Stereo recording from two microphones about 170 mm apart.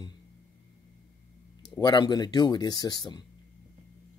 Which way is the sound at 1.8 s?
25° left (ahead or behind).